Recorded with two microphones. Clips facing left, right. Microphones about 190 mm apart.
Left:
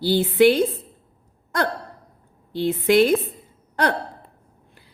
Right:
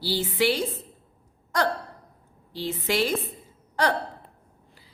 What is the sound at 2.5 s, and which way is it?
Speech, 55° left (ahead or behind).